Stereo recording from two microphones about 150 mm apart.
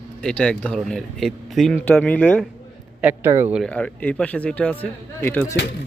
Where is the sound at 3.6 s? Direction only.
5° left (ahead or behind).